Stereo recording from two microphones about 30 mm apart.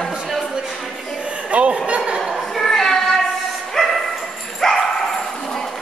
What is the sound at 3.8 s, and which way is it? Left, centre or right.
Bow-wow, centre.